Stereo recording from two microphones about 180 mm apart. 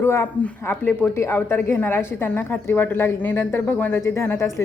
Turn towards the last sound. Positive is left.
turn(degrees=15)  # may be behind; listen again after turning